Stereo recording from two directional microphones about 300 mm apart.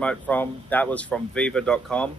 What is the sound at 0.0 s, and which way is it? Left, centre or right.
Speech, centre.